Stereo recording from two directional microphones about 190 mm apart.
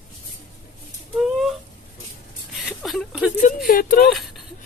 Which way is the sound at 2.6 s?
Centre (ahead or behind).